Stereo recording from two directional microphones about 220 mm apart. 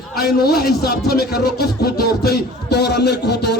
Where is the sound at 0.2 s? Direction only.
45° left (ahead or behind).